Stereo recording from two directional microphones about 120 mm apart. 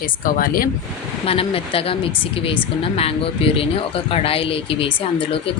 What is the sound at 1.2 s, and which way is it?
Speech, 50° left (ahead or behind).